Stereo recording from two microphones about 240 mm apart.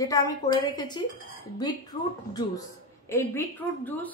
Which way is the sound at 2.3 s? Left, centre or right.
Centre.